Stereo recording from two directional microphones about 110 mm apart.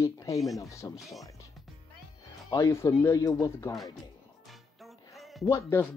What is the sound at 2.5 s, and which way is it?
Speech, 25° left (ahead or behind).